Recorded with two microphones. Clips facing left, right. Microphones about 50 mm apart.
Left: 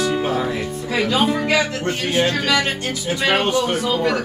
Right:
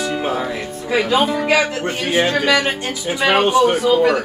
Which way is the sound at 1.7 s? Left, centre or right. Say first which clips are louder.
Right 2 dB; centre.